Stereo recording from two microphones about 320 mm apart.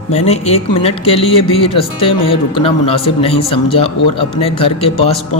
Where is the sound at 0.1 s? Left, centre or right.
Centre.